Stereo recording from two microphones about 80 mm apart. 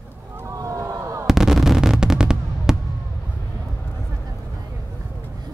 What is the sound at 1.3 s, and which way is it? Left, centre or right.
Fireworks, centre.